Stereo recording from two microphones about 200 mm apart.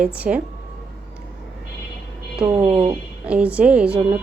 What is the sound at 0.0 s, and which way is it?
Speech, 5° right (ahead or behind).